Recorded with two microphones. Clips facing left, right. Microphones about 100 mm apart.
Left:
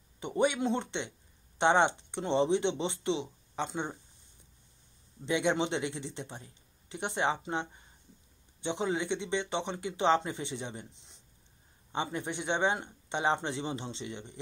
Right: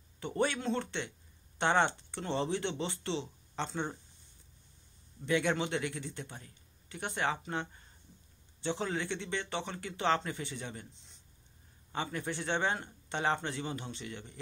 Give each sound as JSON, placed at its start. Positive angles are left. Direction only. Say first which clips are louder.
{"t": 0.2, "sound": "speech", "louder": "left 4 dB", "side_deg": 15}
{"t": 5.2, "sound": "speech", "louder": "left 2 dB", "side_deg": 20}